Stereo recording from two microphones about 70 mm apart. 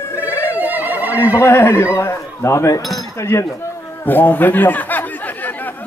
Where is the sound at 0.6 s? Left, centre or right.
Right.